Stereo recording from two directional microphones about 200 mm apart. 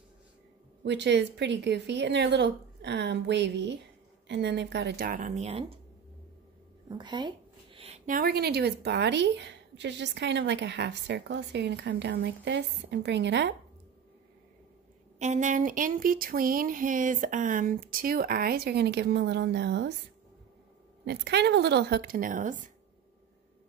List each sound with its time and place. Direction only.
0.8 s a woman's voice: 60° right (ahead or behind); by 5.7 s 30° right (ahead or behind)
6.9 s a sound: 20° right (ahead or behind)
8.2 s a woman's voice: 50° right (ahead or behind)
15.1 s speech: 35° right (ahead or behind); by 19.9 s 60° right (ahead or behind)
21.0 s a woman's voice: 60° right (ahead or behind); by 22.6 s 40° right (ahead or behind)